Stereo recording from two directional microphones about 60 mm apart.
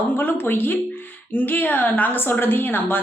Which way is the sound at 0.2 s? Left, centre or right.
Left.